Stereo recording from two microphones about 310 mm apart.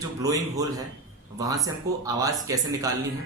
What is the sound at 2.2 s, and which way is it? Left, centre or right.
Speech, centre.